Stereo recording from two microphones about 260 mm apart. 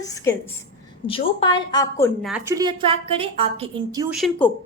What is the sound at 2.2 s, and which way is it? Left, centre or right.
A woman's voice, centre.